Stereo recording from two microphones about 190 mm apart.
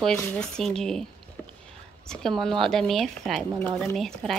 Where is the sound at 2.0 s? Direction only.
5° left (ahead or behind).